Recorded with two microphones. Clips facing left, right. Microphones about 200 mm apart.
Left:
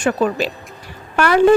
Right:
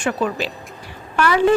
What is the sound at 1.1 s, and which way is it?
Speech, 55° left (ahead or behind).